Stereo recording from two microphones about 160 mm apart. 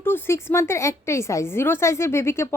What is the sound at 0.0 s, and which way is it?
A woman's voice, 15° left (ahead or behind).